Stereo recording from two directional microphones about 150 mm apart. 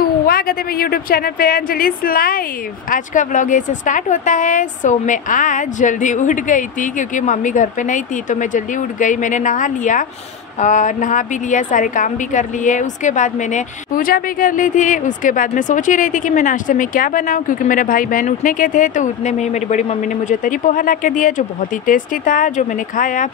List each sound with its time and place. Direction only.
0.3 s a woman's voice: 80° left
2.9 s a woman's voice: 60° left (ahead or behind)